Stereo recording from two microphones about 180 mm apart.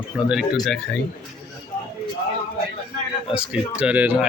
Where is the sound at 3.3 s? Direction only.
5° right (ahead or behind).